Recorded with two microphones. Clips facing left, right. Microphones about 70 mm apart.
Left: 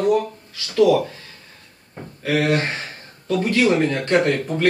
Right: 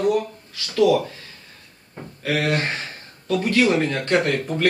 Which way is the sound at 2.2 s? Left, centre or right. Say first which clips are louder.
Left 3 dB; centre.